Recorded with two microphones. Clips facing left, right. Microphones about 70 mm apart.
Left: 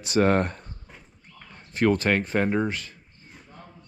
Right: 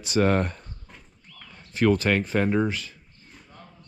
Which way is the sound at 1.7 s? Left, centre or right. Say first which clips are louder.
Even; left.